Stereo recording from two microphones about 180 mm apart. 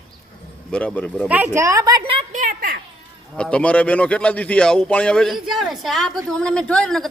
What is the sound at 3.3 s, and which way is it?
A woman's voice, 5° left (ahead or behind).